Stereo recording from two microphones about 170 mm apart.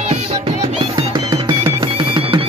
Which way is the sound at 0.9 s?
25° right (ahead or behind).